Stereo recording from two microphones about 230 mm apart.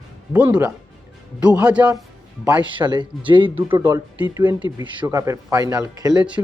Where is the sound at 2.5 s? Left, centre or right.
Centre.